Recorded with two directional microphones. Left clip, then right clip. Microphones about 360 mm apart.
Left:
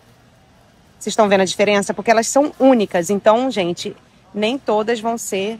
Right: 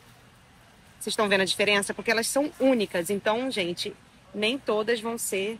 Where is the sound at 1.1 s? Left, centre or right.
Left.